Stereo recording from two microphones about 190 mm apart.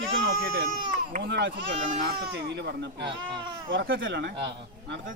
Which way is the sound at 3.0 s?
25° right (ahead or behind).